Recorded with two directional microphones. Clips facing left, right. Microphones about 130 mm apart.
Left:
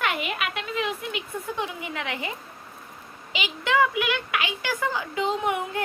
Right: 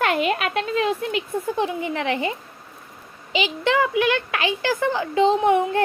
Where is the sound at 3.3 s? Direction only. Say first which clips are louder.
Right 3 dB; 30° right (ahead or behind).